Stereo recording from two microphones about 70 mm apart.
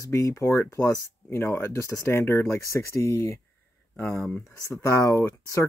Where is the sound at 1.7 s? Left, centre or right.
Left.